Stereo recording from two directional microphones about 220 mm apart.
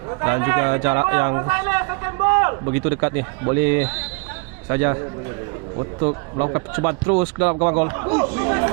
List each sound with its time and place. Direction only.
0.1 s a man's voice: 20° right (ahead or behind)